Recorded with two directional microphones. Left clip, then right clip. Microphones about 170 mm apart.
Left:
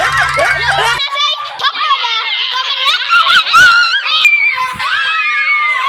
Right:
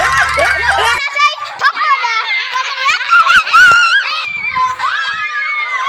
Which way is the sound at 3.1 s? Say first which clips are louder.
Right 1 dB; 10° left (ahead or behind).